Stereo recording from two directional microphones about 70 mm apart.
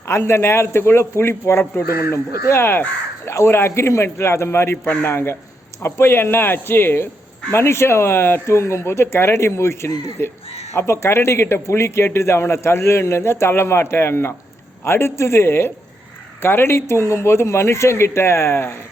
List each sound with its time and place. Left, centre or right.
0.1 s speech: left